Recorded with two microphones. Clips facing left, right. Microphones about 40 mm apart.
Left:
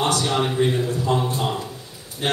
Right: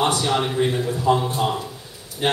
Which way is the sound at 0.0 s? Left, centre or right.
Centre.